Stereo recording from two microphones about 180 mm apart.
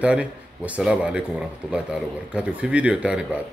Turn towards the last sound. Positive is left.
turn(degrees=-5)  # may be behind; listen again after turning